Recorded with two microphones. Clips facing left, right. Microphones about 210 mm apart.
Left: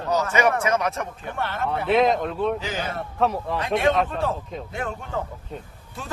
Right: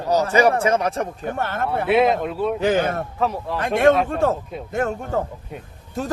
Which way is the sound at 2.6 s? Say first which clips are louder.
Right 10 dB; 55° right (ahead or behind).